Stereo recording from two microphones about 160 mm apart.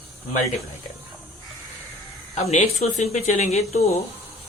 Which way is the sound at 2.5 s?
40° left (ahead or behind).